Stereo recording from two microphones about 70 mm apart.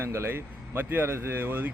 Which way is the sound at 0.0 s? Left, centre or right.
Right.